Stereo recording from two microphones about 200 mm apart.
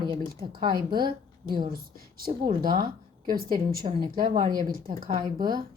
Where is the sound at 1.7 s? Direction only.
45° right (ahead or behind).